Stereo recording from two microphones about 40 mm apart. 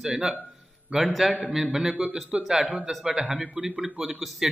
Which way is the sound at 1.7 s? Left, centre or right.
Centre.